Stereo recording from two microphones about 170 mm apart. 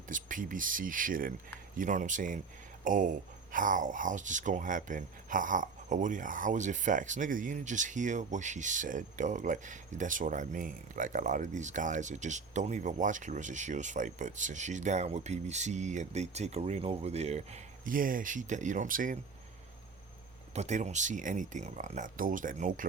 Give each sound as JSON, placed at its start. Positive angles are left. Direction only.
{"t": 0.1, "sound": "speech", "side_deg": -50}
{"t": 20.5, "sound": "speech", "side_deg": -40}